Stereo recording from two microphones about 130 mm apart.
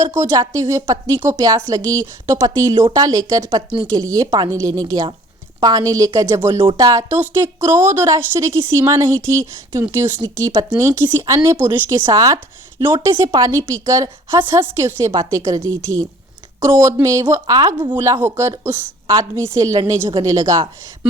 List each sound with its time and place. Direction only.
0.0 s a woman's voice: 20° right (ahead or behind); by 18.0 s 35° right (ahead or behind)
18.0 s a woman's voice: 20° right (ahead or behind)